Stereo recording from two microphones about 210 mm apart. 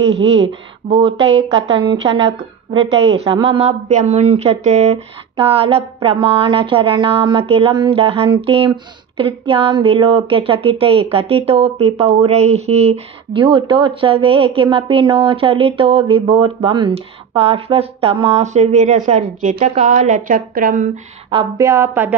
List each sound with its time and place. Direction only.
0.4 s speech: 30° right (ahead or behind); by 22.1 s 10° right (ahead or behind)